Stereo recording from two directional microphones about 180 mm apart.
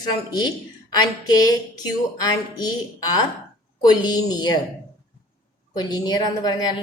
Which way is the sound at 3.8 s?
25° left (ahead or behind).